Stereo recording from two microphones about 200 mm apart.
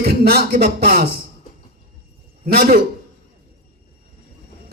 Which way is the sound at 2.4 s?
45° right (ahead or behind).